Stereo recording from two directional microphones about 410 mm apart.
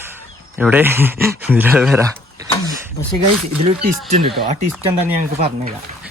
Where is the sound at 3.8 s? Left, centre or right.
Centre.